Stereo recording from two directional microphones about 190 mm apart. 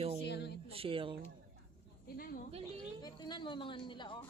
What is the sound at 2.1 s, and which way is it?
Speech, 50° left (ahead or behind).